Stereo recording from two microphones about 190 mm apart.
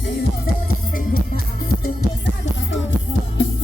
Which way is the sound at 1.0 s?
50° left (ahead or behind).